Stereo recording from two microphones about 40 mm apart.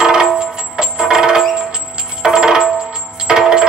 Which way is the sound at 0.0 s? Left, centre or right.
Centre.